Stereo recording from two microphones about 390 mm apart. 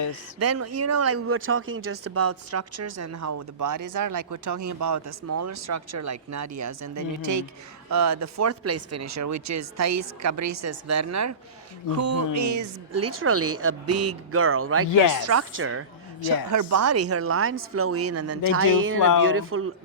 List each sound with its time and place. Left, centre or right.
0.3 s speech: right
16.5 s speech: right